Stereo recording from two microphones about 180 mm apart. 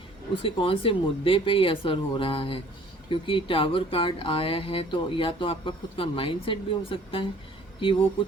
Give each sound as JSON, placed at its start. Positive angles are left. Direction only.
{"t": 0.4, "sound": "speech", "side_deg": 30}